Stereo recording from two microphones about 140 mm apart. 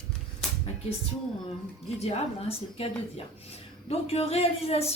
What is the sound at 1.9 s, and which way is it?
Speech, 50° left (ahead or behind).